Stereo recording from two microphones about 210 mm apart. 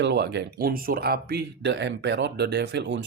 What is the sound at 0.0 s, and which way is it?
Speech, 55° right (ahead or behind).